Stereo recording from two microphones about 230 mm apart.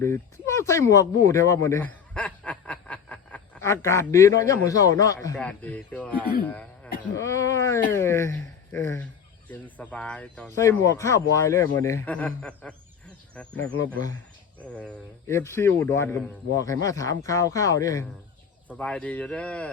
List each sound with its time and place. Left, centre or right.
0.0 s speech: centre
14.8 s speech: centre